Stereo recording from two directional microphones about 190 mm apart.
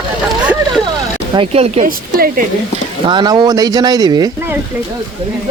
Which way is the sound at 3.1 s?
25° right (ahead or behind).